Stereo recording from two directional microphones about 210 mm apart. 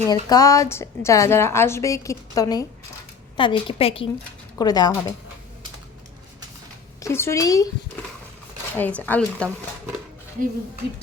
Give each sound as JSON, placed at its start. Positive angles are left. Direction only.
{"t": 0.1, "sound": "a woman's voice", "side_deg": 15}
{"t": 7.0, "sound": "a woman's voice", "side_deg": 10}
{"t": 8.7, "sound": "a woman's voice", "side_deg": 10}